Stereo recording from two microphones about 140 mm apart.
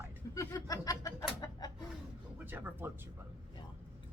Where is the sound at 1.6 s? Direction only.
25° left (ahead or behind).